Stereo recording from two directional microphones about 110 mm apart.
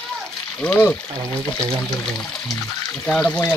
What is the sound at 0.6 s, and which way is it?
Speech, 15° left (ahead or behind).